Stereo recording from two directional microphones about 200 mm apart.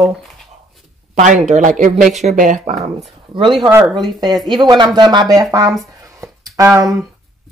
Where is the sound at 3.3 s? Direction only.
25° right (ahead or behind).